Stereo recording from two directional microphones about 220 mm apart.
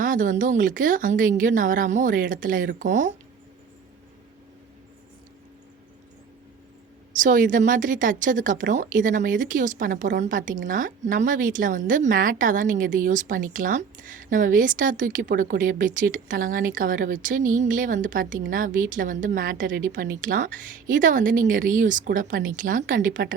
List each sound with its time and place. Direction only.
0.0 s a woman's voice: 35° right (ahead or behind)
7.1 s a woman's voice: 35° right (ahead or behind)